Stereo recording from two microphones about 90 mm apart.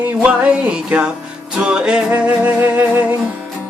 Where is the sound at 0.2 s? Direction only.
15° right (ahead or behind).